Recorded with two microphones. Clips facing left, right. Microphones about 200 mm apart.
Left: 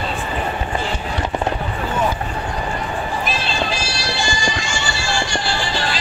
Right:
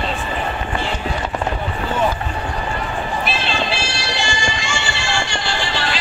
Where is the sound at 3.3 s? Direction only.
40° left (ahead or behind).